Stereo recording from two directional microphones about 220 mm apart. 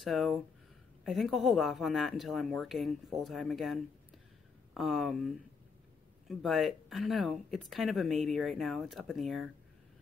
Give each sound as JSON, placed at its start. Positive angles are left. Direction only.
{"t": 0.0, "sound": "speech", "side_deg": 0}